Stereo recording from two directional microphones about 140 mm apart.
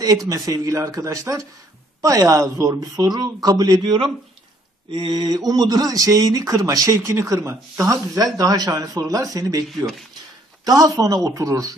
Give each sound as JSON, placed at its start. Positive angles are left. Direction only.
{"t": 0.0, "sound": "speech", "side_deg": -25}
{"t": 10.6, "sound": "speech", "side_deg": -25}